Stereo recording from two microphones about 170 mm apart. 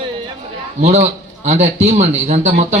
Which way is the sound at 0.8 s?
40° right (ahead or behind).